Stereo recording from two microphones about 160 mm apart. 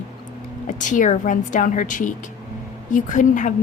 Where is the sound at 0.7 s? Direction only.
50° left (ahead or behind).